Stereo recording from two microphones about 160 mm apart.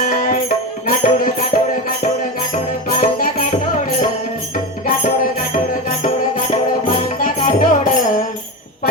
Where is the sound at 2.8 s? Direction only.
65° left (ahead or behind).